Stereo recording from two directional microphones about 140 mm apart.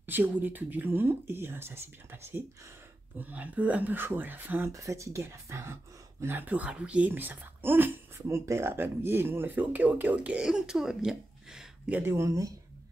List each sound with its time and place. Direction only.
0.0 s speech: 15° right (ahead or behind)
12.0 s speech: 20° right (ahead or behind)